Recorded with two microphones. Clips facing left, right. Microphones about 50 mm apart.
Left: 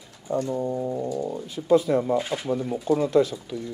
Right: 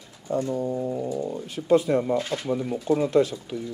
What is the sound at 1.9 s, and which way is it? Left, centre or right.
Speech, centre.